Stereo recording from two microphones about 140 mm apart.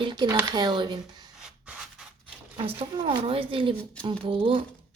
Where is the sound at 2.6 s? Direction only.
40° right (ahead or behind).